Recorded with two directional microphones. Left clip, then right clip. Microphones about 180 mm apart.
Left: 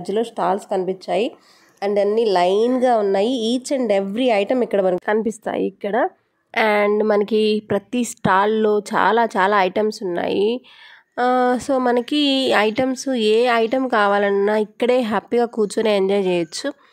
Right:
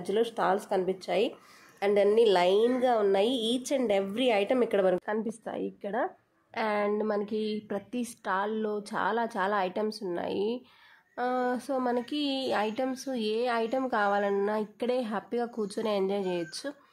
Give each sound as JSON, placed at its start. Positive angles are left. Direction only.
{"t": 0.0, "sound": "speech", "side_deg": 25}
{"t": 5.0, "sound": "a woman's voice", "side_deg": 45}